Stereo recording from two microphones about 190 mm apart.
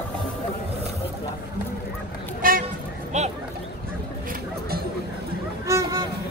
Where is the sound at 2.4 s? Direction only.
50° right (ahead or behind).